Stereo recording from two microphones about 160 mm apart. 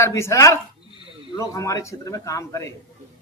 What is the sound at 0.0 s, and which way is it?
Speech, 15° left (ahead or behind).